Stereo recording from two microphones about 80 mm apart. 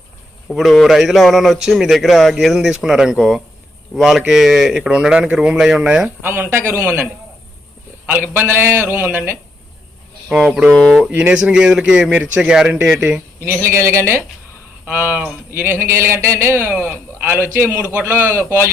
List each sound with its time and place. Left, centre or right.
0.4 s a man's voice: centre
6.2 s a man's voice: right
8.0 s a man's voice: right
10.3 s a man's voice: centre
11.1 s a man's voice: centre
13.4 s a man's voice: right
14.8 s a man's voice: centre
15.4 s a man's voice: right